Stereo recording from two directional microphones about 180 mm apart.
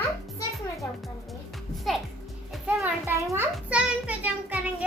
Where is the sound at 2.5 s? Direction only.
5° right (ahead or behind).